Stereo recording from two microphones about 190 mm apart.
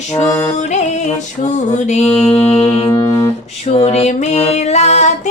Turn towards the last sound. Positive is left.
turn(degrees=35)  # may be behind; listen again after turning